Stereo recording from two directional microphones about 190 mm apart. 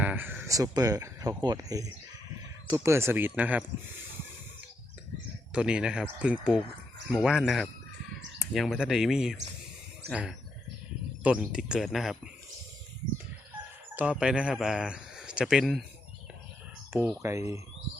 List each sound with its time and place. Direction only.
0.0 s speech: 10° right (ahead or behind)
5.5 s speech: 5° right (ahead or behind)
13.9 s speech: 5° right (ahead or behind)
16.9 s speech: 15° right (ahead or behind)